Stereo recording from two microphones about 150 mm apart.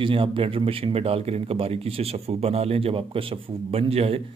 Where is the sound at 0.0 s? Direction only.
35° right (ahead or behind).